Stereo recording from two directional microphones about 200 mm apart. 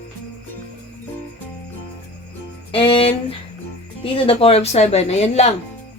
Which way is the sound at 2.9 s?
25° left (ahead or behind).